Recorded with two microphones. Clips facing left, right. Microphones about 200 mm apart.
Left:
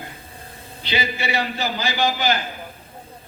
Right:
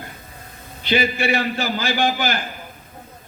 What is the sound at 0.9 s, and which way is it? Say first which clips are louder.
A man's voice: right 6 dB; 50° right (ahead or behind).